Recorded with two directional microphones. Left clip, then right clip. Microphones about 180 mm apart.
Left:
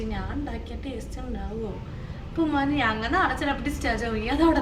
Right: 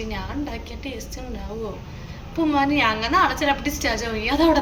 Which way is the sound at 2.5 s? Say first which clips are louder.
Right 6 dB; 15° left (ahead or behind).